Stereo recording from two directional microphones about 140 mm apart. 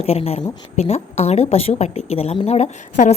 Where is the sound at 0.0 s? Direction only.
45° left (ahead or behind).